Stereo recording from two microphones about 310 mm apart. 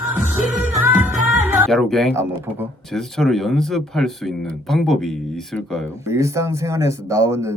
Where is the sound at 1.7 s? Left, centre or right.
Centre.